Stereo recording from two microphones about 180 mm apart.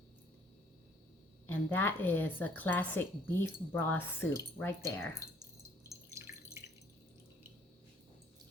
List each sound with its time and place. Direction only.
1.5 s speech: 10° left (ahead or behind)
5.9 s drip: 15° right (ahead or behind)